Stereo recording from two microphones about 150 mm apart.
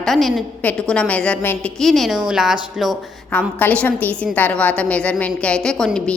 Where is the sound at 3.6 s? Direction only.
10° left (ahead or behind).